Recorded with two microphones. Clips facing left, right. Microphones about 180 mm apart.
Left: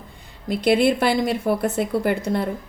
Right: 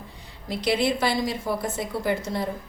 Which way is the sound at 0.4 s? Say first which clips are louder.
Left 6 dB; 55° left (ahead or behind).